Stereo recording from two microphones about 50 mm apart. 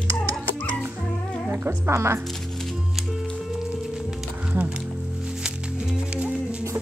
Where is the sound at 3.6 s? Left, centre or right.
Centre.